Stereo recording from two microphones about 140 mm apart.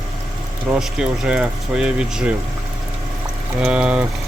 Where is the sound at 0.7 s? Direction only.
5° right (ahead or behind).